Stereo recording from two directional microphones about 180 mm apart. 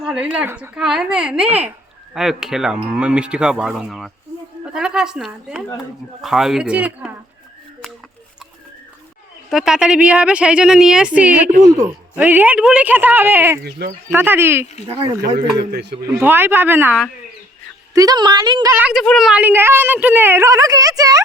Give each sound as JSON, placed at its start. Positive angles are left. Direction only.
{"t": 0.0, "sound": "speech", "side_deg": -5}
{"t": 9.5, "sound": "a woman's voice", "side_deg": 0}
{"t": 13.7, "sound": "speech", "side_deg": -65}
{"t": 14.1, "sound": "a woman's voice", "side_deg": -10}
{"t": 15.5, "sound": "speech", "side_deg": -65}
{"t": 16.2, "sound": "a woman's voice", "side_deg": -10}
{"t": 17.9, "sound": "a woman's voice", "side_deg": -20}
{"t": 18.8, "sound": "a woman's voice", "side_deg": -5}